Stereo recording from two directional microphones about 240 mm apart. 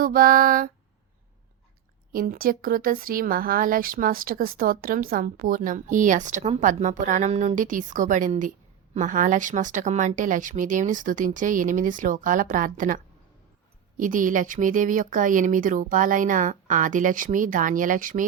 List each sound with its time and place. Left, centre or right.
0.0 s speech: right
2.1 s speech: right